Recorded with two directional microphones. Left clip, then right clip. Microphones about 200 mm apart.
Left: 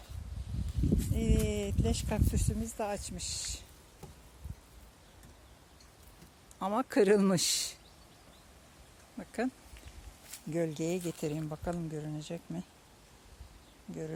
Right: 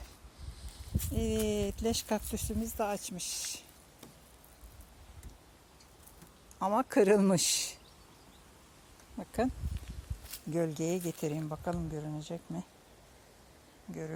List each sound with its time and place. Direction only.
0.9 s speech: 25° right (ahead or behind)
6.6 s speech: centre (ahead or behind)
9.1 s a sound: 10° right (ahead or behind)
10.5 s speech: centre (ahead or behind)